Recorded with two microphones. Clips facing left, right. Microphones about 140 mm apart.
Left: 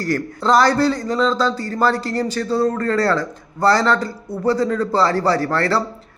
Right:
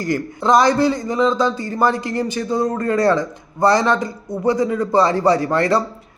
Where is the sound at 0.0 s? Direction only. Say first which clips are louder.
Even; 15° right (ahead or behind).